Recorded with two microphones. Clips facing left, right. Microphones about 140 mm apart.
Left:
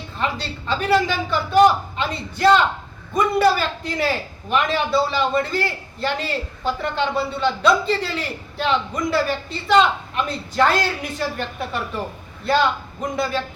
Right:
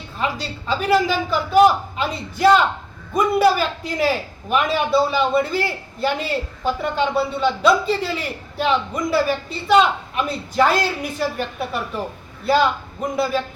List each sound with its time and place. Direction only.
0.2 s a man's voice: 5° right (ahead or behind)